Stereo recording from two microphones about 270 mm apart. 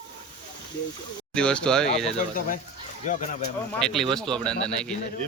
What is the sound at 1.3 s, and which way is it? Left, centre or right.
Speech, centre.